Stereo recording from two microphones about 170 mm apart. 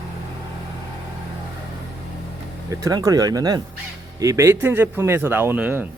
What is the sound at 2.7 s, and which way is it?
Speech, 20° right (ahead or behind).